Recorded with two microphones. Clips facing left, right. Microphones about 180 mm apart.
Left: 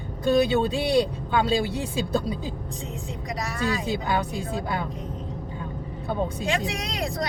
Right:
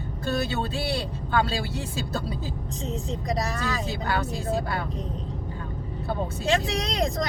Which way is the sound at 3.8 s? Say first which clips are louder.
Left 2 dB; 15° left (ahead or behind).